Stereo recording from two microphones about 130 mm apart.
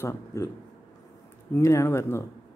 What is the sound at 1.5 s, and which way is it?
Speech, 20° left (ahead or behind).